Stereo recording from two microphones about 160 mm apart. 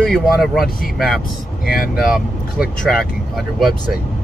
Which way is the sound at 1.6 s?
65° left (ahead or behind).